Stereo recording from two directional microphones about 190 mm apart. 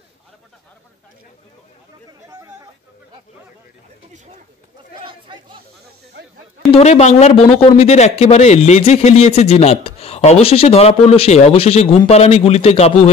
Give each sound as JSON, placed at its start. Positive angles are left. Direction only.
{"t": 2.2, "sound": "chatter", "side_deg": -20}
{"t": 6.7, "sound": "speech", "side_deg": 35}